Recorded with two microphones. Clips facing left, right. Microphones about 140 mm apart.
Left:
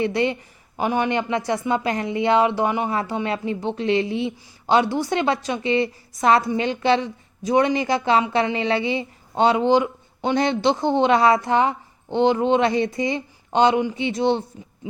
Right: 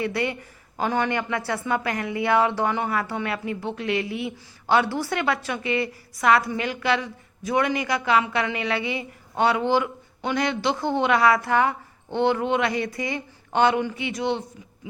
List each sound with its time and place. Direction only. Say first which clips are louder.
0.0 s a woman's voice: left 5 dB; 25° left (ahead or behind)